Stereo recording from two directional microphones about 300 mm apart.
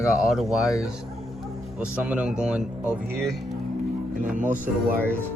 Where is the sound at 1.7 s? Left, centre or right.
Centre.